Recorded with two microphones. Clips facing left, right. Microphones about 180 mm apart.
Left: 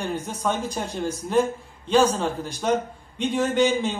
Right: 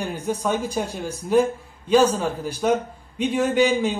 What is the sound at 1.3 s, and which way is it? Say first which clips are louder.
A man's voice: right 4 dB; 5° right (ahead or behind).